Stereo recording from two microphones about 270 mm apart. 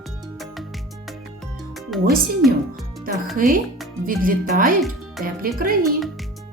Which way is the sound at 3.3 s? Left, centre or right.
Right.